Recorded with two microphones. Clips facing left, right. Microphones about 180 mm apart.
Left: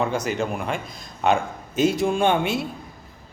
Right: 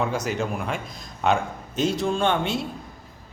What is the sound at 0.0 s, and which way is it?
A man's voice, centre (ahead or behind).